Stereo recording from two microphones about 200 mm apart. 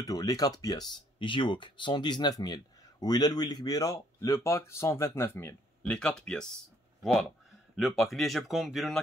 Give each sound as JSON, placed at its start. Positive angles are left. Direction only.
{"t": 0.0, "sound": "speech", "side_deg": 20}